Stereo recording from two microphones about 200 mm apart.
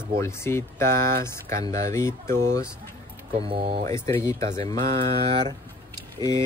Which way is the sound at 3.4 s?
25° right (ahead or behind).